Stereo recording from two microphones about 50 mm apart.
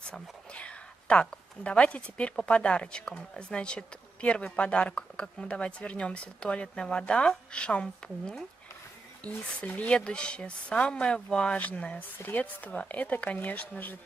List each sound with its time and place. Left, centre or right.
0.5 s whispering: left
1.6 s speech: left
12.0 s speech: left